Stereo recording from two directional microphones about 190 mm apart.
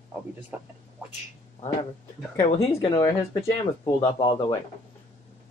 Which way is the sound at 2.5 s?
30° left (ahead or behind).